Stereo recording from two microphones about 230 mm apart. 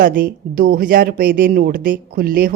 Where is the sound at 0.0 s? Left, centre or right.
Right.